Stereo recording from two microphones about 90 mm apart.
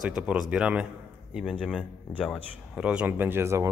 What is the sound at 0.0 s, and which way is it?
Speech, 10° right (ahead or behind).